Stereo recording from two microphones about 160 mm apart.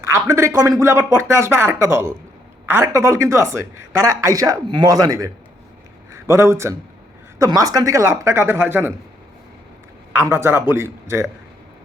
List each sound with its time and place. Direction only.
0.0 s a man's voice: 20° right (ahead or behind)
10.1 s speech: 15° right (ahead or behind)